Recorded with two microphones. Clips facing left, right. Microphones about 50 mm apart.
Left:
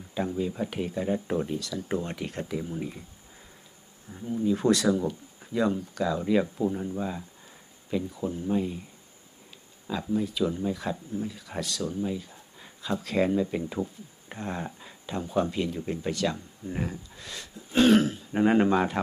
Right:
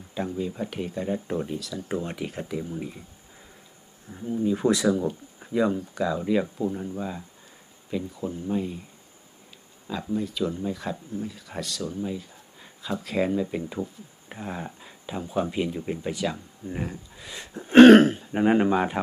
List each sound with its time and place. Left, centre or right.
0.1 s speech: centre
4.1 s speech: centre
9.8 s speech: centre
17.6 s throat clearing: right
18.3 s speech: centre